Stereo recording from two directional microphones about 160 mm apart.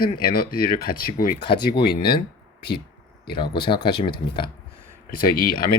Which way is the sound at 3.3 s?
30° left (ahead or behind).